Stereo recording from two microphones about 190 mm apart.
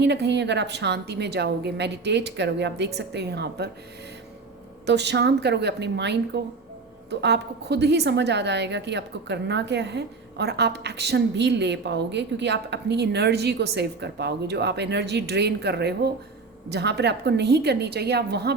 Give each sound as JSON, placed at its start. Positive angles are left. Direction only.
{"t": 0.0, "sound": "a woman's voice", "side_deg": -65}
{"t": 4.9, "sound": "a woman's voice", "side_deg": -65}